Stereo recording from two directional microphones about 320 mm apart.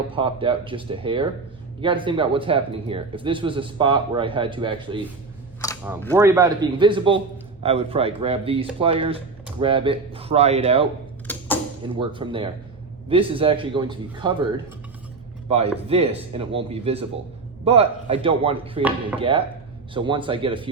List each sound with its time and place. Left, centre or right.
0.1 s speech: centre
6.1 s speech: centre
11.3 s a sound: centre
11.9 s speech: centre
15.4 s speech: centre
19.9 s speech: centre